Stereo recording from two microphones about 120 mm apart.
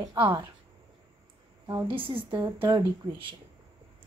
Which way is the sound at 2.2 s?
35° right (ahead or behind).